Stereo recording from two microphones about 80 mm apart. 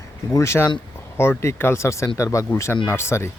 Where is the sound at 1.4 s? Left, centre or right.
Left.